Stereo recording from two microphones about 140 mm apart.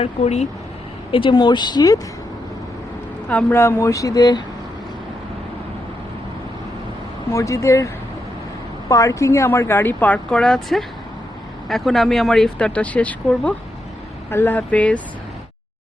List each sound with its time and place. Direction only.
0.0 s speech: 50° left (ahead or behind)
1.1 s speech: 35° left (ahead or behind)
3.2 s speech: 15° left (ahead or behind); by 4.4 s 30° left (ahead or behind)
7.3 s speech: 20° left (ahead or behind)
8.9 s speech: 25° left (ahead or behind)